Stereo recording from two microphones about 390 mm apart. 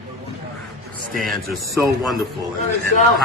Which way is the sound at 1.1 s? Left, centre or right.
Right.